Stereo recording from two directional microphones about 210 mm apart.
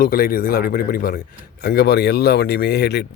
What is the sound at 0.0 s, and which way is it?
Speech, 45° left (ahead or behind).